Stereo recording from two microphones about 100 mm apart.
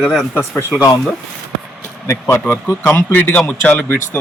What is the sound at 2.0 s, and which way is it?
Speech, 30° left (ahead or behind).